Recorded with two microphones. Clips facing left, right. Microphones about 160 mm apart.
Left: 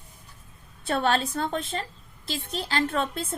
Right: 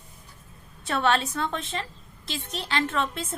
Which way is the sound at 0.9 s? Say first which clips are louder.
Even; 35° left (ahead or behind).